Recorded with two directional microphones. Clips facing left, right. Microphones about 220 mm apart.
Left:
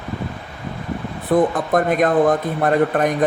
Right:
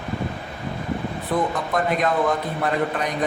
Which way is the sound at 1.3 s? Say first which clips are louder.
Left 7 dB; 50° left (ahead or behind).